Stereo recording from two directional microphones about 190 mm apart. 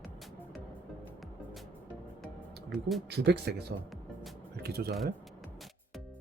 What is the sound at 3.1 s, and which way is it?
Speech, 60° right (ahead or behind).